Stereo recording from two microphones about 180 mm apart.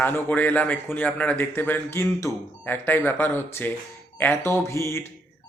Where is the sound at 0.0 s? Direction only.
10° left (ahead or behind).